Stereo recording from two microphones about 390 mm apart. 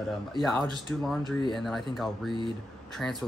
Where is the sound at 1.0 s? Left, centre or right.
Centre.